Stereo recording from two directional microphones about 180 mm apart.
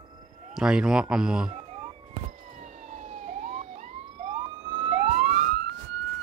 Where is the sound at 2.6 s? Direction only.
40° right (ahead or behind).